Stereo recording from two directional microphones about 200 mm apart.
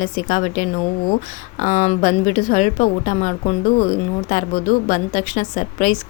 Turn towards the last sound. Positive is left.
turn(degrees=40)  # may be behind; listen again after turning